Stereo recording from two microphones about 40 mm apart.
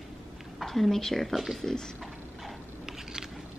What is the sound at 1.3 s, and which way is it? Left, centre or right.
Speech, centre.